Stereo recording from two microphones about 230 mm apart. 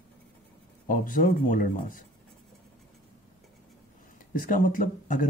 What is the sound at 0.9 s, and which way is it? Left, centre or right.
Speech, left.